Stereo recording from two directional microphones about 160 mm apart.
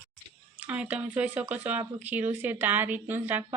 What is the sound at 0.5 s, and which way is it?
Speech, 10° right (ahead or behind).